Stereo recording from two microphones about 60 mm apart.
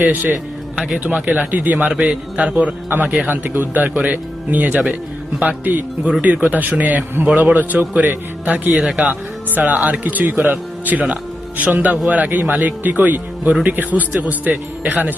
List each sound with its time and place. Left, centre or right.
0.0 s a man's voice: right
3.2 s a man's voice: right; by 9.1 s centre
9.5 s speech: right
9.7 s a man's voice: right